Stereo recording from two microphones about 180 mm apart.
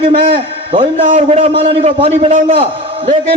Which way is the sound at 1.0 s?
40° right (ahead or behind).